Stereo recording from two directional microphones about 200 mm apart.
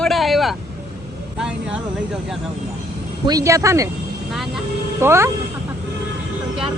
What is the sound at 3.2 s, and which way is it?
Speech, 15° right (ahead or behind).